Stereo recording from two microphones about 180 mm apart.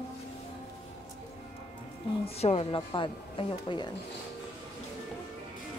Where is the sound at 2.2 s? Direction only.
30° left (ahead or behind).